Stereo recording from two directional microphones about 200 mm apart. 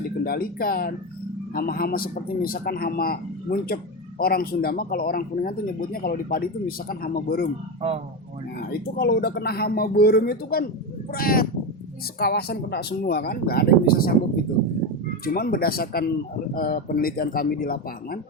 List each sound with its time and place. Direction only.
0.3 s speech: 50° left (ahead or behind)
7.8 s speech: 30° right (ahead or behind)
8.7 s speech: 50° left (ahead or behind)
15.2 s speech: 50° left (ahead or behind)